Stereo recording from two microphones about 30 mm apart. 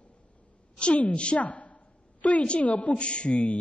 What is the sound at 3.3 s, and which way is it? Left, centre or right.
Speech, left.